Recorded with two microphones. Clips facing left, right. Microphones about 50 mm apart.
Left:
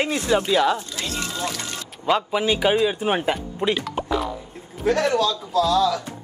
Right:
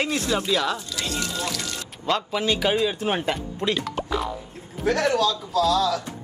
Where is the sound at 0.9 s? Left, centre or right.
Left.